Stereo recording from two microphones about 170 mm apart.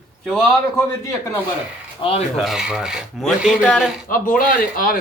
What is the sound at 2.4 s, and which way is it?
Filing, centre (ahead or behind).